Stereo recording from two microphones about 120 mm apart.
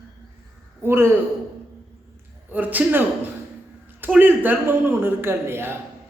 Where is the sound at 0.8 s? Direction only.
20° right (ahead or behind).